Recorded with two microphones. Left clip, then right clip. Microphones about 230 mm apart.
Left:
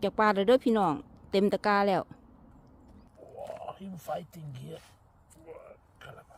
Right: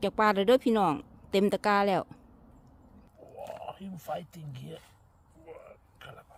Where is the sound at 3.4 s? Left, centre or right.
Centre.